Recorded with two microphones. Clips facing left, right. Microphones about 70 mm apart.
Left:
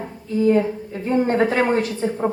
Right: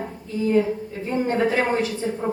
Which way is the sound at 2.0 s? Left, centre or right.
Left.